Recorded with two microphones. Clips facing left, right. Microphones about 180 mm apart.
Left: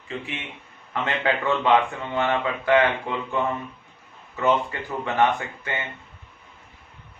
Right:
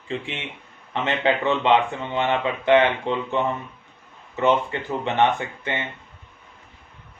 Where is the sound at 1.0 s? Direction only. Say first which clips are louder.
Right 3 dB; 20° right (ahead or behind).